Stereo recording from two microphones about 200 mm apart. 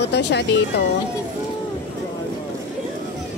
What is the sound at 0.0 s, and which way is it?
Speech, 60° left (ahead or behind).